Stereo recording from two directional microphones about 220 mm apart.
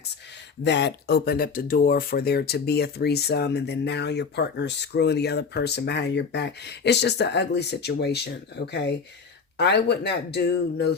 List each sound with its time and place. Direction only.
0.6 s speech: 50° left (ahead or behind)